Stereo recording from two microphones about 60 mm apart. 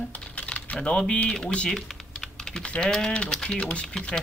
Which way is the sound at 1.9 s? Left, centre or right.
Centre.